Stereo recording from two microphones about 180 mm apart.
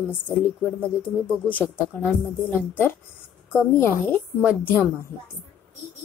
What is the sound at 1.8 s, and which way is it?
Speech, 10° left (ahead or behind).